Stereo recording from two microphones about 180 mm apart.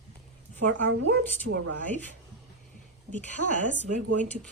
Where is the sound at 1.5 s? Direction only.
90° right.